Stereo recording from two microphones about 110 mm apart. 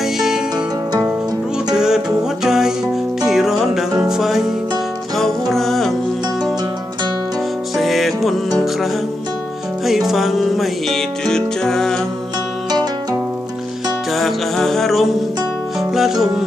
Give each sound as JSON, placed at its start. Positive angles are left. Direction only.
{"t": 0.0, "sound": "music", "side_deg": -5}
{"t": 0.5, "sound": "music", "side_deg": -25}
{"t": 1.7, "sound": "music", "side_deg": -5}
{"t": 7.8, "sound": "music", "side_deg": 0}
{"t": 14.1, "sound": "music", "side_deg": 0}